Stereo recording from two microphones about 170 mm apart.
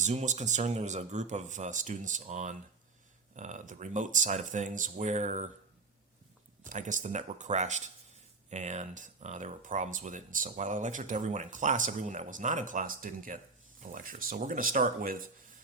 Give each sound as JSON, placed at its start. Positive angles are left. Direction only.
{"t": 0.0, "sound": "speech", "side_deg": -45}
{"t": 6.7, "sound": "speech", "side_deg": -50}